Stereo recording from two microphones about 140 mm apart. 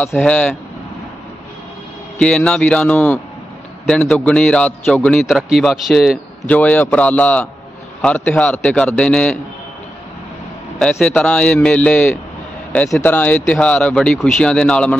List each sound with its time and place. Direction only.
0.1 s a man's voice: 5° left (ahead or behind)
2.1 s a man's voice: 5° left (ahead or behind)
6.4 s speech: 10° left (ahead or behind)
10.8 s a man's voice: 5° left (ahead or behind)
13.0 s speech: 10° left (ahead or behind)